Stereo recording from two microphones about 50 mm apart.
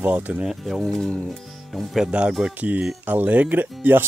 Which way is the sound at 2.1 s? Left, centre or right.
Right.